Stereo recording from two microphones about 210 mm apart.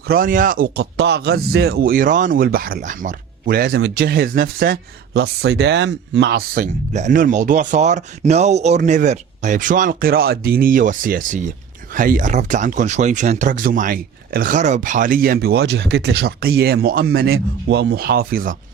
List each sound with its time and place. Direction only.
0.1 s speech: 40° right (ahead or behind)